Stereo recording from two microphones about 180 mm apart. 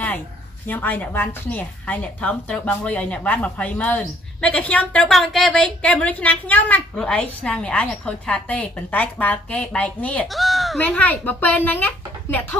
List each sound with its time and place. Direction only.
0.7 s a woman's voice: 10° left (ahead or behind)